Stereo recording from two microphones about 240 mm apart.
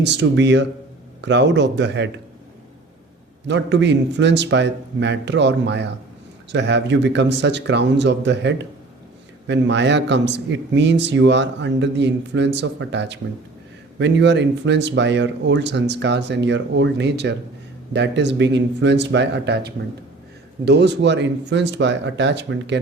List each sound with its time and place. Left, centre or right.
0.0 s a man's voice: right
3.4 s a man's voice: right